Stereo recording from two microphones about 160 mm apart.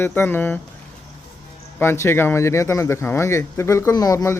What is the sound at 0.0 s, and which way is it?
Speech, 15° left (ahead or behind).